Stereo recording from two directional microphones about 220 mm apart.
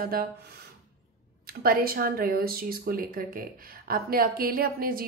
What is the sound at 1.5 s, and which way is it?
A woman's voice, 45° right (ahead or behind).